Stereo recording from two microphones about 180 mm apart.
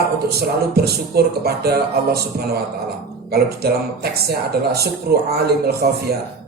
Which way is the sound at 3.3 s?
60° right (ahead or behind).